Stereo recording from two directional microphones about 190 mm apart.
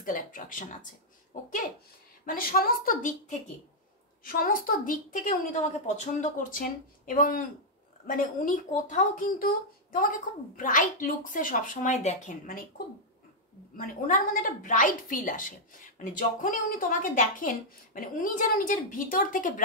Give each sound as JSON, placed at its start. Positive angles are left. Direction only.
{"t": 0.0, "sound": "a woman's voice", "side_deg": 45}
{"t": 7.1, "sound": "a woman's voice", "side_deg": 50}